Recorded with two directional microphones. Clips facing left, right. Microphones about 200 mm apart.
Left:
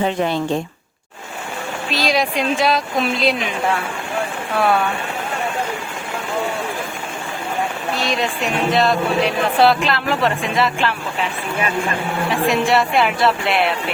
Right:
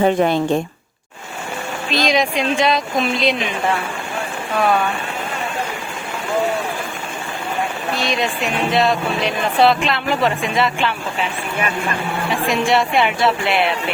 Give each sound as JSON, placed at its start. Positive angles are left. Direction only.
{"t": 0.0, "sound": "a woman's voice", "side_deg": -50}
{"t": 1.9, "sound": "speech", "side_deg": 5}
{"t": 8.0, "sound": "speech", "side_deg": 0}
{"t": 12.3, "sound": "speech", "side_deg": 0}